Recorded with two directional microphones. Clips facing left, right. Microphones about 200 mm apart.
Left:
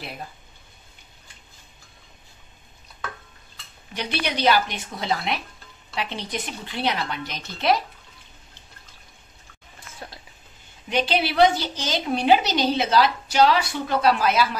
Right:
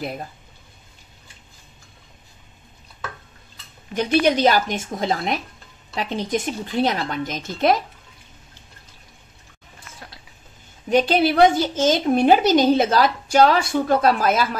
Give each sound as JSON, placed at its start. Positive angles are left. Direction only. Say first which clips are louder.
{"t": 3.9, "sound": "a woman's voice", "louder": "right 10 dB", "side_deg": -45}
{"t": 10.9, "sound": "a woman's voice", "louder": "right 6 dB", "side_deg": -45}